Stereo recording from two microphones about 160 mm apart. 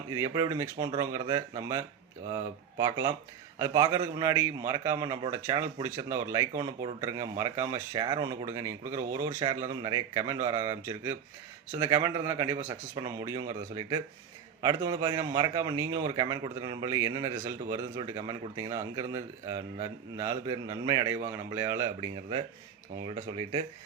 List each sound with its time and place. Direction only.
0.1 s a man's voice: 25° right (ahead or behind)
22.1 s speech: 35° right (ahead or behind)